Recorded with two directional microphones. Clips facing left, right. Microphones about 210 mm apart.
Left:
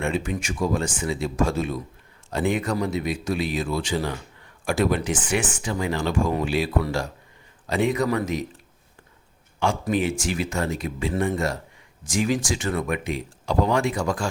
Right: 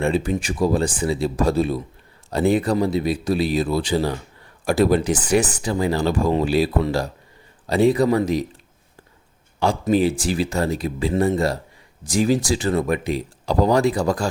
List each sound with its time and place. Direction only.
0.0 s speech: 35° right (ahead or behind)
7.7 s speech: 35° right (ahead or behind)
9.8 s speech: 35° right (ahead or behind)